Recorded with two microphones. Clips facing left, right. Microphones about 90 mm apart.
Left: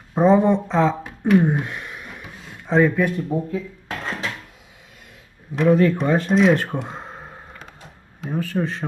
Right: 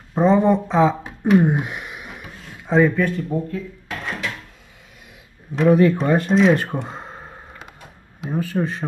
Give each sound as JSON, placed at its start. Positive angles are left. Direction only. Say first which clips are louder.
{"t": 0.1, "sound": "speech", "louder": "even", "side_deg": 5}
{"t": 1.0, "sound": "a sound", "louder": "right 1 dB", "side_deg": -20}
{"t": 2.2, "sound": "a sound", "louder": "right 2 dB", "side_deg": 0}
{"t": 3.0, "sound": "speech", "louder": "even", "side_deg": 10}
{"t": 3.9, "sound": "dishes", "louder": "even", "side_deg": 35}
{"t": 5.6, "sound": "speech", "louder": "right 2 dB", "side_deg": -5}